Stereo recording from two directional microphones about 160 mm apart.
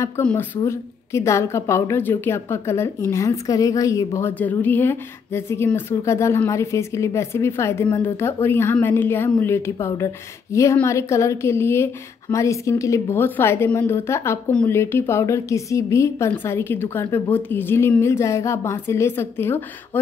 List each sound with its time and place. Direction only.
0.2 s a woman's voice: 5° left (ahead or behind)
0.7 s a woman's voice: 20° left (ahead or behind)